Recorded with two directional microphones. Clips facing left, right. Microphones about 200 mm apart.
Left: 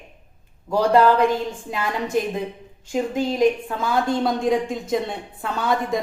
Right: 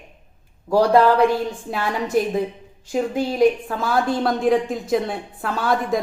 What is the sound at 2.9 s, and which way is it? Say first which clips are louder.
A woman's voice: right 1 dB; 5° right (ahead or behind).